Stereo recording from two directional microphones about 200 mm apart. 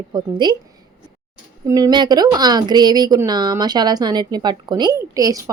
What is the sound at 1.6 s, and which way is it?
A woman's voice, 20° right (ahead or behind).